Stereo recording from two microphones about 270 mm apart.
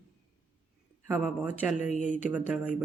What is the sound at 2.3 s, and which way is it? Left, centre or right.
Speech, centre.